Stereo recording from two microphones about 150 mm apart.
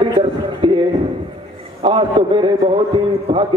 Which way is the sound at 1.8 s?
35° right (ahead or behind).